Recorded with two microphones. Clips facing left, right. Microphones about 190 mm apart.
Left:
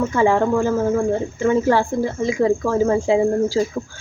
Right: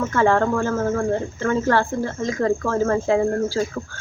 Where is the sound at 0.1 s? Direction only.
15° left (ahead or behind).